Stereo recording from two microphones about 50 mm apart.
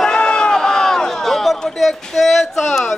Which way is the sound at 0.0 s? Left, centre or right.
Centre.